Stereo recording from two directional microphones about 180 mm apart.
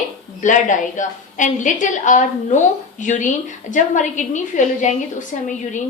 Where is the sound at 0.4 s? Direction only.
45° left (ahead or behind).